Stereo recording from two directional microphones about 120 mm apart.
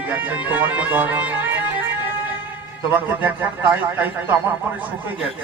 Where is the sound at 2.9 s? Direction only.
15° right (ahead or behind).